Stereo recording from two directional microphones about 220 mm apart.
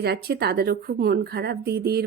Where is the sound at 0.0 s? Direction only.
45° right (ahead or behind).